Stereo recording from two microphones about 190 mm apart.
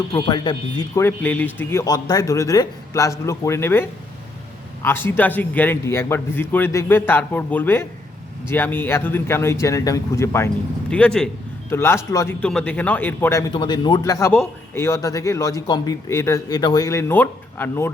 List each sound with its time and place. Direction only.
0.1 s a man's voice: 25° left (ahead or behind)
13.5 s a man's voice: 25° left (ahead or behind)